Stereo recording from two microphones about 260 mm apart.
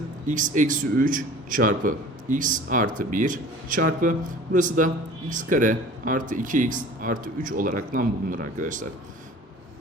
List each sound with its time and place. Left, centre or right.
0.3 s a man's voice: right